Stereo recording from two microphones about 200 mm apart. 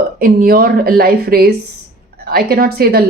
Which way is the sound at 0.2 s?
45° right (ahead or behind).